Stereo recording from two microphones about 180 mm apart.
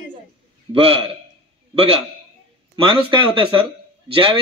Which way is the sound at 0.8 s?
30° right (ahead or behind).